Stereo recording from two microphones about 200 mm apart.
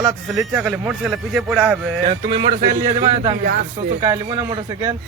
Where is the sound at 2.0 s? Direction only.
25° right (ahead or behind).